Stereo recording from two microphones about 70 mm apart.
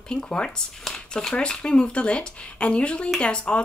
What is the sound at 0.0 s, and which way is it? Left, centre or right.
Speech, centre.